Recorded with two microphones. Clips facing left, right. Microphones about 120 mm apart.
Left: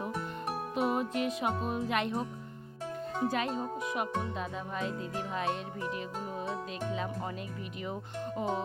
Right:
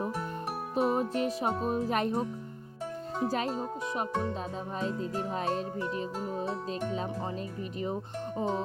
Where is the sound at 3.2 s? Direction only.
35° right (ahead or behind).